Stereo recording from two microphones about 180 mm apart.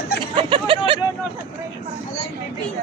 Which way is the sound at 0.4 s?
30° right (ahead or behind).